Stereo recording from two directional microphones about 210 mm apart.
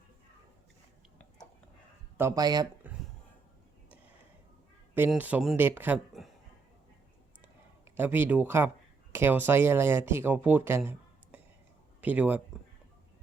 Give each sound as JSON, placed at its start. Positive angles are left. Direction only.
{"t": 2.1, "sound": "speech", "side_deg": -15}
{"t": 2.8, "sound": "a sound", "side_deg": -10}
{"t": 4.9, "sound": "speech", "side_deg": -10}
{"t": 7.9, "sound": "speech", "side_deg": -10}